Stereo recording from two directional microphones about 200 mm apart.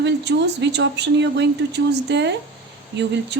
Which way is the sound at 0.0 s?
60° right (ahead or behind).